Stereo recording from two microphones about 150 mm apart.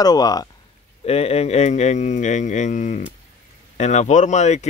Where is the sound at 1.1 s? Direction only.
45° left (ahead or behind).